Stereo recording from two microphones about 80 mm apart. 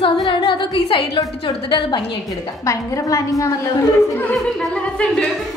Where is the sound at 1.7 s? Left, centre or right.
Left.